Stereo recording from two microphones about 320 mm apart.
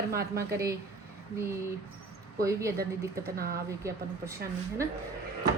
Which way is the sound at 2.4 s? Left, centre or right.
Centre.